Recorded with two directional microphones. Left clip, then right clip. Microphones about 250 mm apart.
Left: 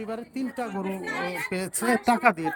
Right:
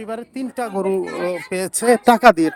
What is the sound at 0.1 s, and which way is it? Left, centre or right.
A woman's voice, centre.